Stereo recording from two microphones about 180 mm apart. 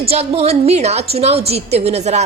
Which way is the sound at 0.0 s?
35° right (ahead or behind).